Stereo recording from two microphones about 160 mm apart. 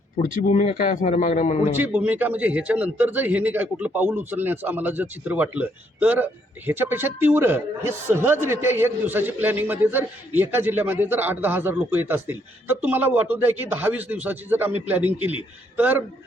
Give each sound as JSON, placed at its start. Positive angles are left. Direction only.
{"t": 0.2, "sound": "speech", "side_deg": 55}
{"t": 1.7, "sound": "a man's voice", "side_deg": -10}